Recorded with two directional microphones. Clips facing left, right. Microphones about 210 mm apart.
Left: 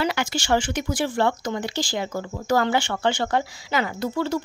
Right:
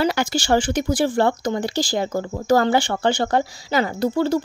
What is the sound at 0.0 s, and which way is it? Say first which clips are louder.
Speech: right 4 dB; 35° right (ahead or behind).